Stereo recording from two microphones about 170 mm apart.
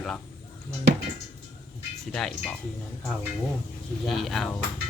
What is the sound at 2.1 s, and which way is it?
Speech, 5° left (ahead or behind).